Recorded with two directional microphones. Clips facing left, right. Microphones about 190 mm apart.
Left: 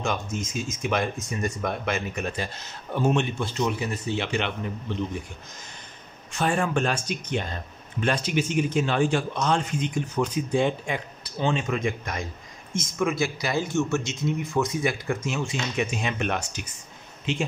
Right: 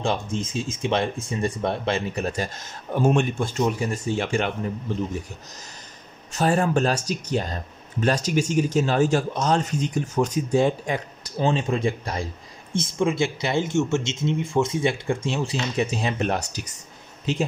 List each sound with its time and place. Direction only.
0.0 s speech: 30° right (ahead or behind)
6.3 s speech: 40° right (ahead or behind)